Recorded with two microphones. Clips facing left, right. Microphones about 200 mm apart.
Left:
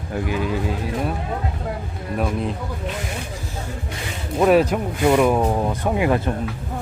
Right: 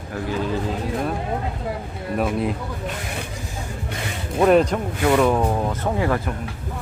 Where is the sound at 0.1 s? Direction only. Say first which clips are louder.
Left 1 dB; 15° left (ahead or behind).